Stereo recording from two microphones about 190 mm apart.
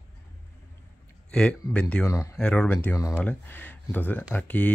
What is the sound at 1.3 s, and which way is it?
Speech, 5° left (ahead or behind).